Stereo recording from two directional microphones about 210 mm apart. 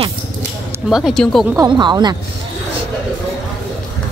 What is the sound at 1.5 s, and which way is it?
Speech, 20° right (ahead or behind).